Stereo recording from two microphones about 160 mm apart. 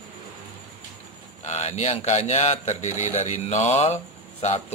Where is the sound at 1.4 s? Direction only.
45° left (ahead or behind).